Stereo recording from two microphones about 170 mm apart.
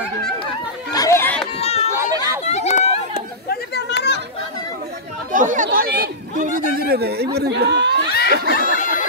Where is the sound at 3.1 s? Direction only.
70° left (ahead or behind).